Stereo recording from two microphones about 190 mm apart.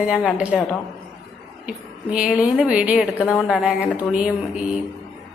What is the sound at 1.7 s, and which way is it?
A woman's voice, 5° right (ahead or behind).